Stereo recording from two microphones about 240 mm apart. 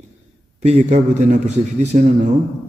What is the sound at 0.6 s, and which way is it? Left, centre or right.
A man's voice, right.